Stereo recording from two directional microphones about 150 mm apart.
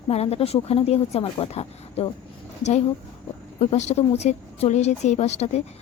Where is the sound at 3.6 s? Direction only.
45° left (ahead or behind).